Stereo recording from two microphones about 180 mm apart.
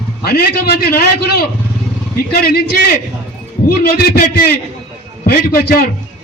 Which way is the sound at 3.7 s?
60° left (ahead or behind).